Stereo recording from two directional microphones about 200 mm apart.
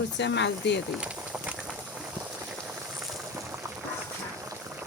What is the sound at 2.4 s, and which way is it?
Boiling, centre (ahead or behind).